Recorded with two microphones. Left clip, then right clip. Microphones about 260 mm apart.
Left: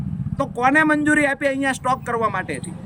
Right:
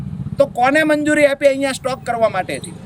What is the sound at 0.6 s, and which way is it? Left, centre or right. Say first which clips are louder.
Speech: left 1 dB; centre.